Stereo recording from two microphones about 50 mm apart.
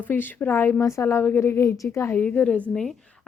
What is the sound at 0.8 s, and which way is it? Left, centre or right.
Speech, left.